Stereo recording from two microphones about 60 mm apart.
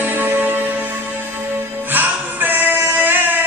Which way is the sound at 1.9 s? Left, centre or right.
Right.